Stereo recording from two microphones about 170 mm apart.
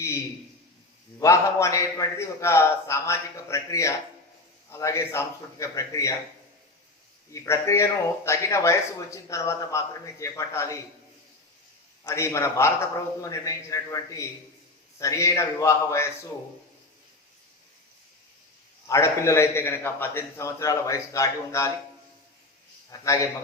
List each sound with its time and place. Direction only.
1.2 s a man's voice: 15° left (ahead or behind)
7.3 s a man's voice: 15° left (ahead or behind)
12.0 s a man's voice: 15° left (ahead or behind)
18.9 s a man's voice: 15° left (ahead or behind)
22.9 s a man's voice: 20° left (ahead or behind)